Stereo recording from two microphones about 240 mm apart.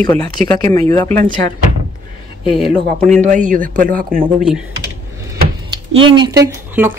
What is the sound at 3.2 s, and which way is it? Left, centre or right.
Speech, right.